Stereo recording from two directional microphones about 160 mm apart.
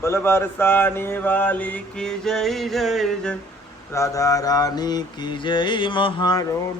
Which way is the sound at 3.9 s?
20° left (ahead or behind).